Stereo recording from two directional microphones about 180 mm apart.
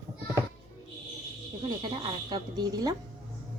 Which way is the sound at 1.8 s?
25° right (ahead or behind).